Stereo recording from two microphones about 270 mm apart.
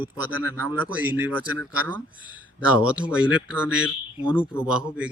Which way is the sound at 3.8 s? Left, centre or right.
Centre.